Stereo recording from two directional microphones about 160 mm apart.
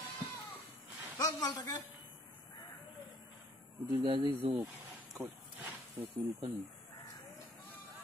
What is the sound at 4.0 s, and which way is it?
Speech, 30° right (ahead or behind).